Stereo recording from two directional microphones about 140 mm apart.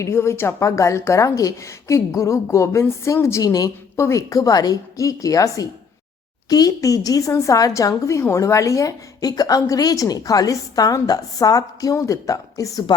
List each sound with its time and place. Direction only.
0.0 s a woman's voice: 20° left (ahead or behind)